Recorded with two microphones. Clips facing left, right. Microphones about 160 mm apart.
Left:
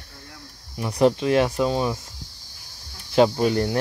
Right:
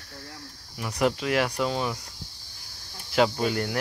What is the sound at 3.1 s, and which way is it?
Speech, 20° left (ahead or behind).